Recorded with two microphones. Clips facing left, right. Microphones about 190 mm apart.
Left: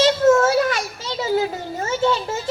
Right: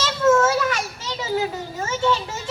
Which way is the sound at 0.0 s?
40° left (ahead or behind).